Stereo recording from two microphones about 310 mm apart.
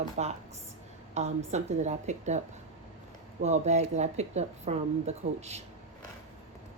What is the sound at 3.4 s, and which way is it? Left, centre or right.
Speech, right.